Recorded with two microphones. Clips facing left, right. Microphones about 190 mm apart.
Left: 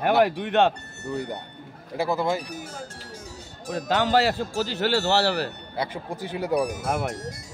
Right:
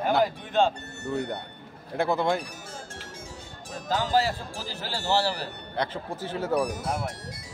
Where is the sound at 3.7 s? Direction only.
70° left (ahead or behind).